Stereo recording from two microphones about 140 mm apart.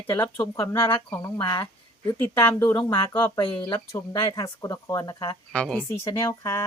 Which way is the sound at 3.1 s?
30° left (ahead or behind).